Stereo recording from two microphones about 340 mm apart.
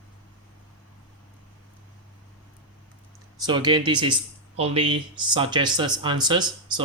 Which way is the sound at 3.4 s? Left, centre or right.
Centre.